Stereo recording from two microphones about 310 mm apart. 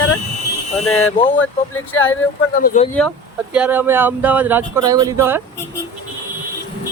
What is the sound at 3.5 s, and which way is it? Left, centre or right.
Speech, centre.